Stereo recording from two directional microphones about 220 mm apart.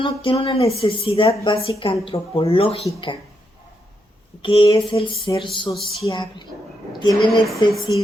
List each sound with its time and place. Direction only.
0.0 s speech: 25° left (ahead or behind)
1.3 s a woman's voice: 15° left (ahead or behind)
1.5 s speech: 25° left (ahead or behind)
4.4 s speech: 25° left (ahead or behind)
5.7 s speech: centre (ahead or behind)
6.1 s speech: 20° left (ahead or behind)